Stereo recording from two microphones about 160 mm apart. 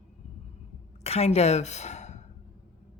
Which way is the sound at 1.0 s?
40° left (ahead or behind).